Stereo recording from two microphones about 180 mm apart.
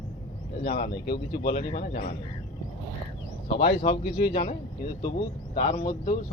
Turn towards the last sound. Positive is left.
turn(degrees=40)  # may be behind; listen again after turning